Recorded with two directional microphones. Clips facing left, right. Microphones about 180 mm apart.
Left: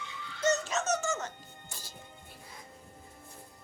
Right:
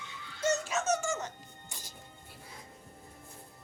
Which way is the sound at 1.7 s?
15° right (ahead or behind).